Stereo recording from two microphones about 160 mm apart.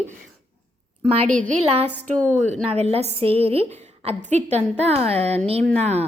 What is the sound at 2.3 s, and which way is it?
A woman's voice, 45° right (ahead or behind).